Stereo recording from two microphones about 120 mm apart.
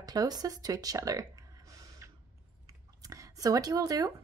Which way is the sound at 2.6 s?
30° right (ahead or behind).